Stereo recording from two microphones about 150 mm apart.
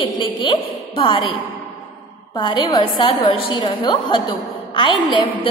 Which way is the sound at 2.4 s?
30° left (ahead or behind).